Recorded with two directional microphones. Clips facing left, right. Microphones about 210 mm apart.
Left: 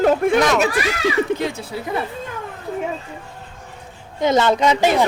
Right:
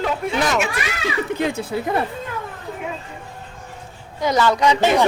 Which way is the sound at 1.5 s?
55° right (ahead or behind).